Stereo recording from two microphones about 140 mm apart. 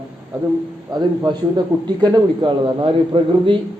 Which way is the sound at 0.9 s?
30° right (ahead or behind).